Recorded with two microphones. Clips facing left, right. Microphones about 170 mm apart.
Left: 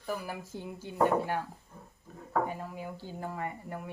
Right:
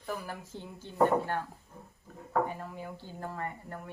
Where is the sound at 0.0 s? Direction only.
10° left (ahead or behind).